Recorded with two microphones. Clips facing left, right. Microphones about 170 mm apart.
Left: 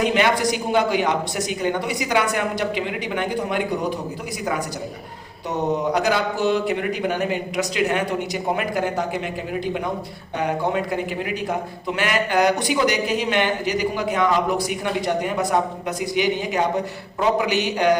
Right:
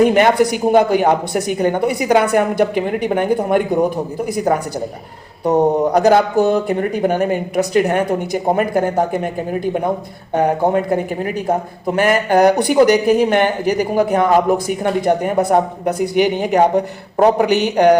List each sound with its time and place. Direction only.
0.0 s a man's voice: 50° right (ahead or behind)
5.5 s a man's voice: 50° right (ahead or behind)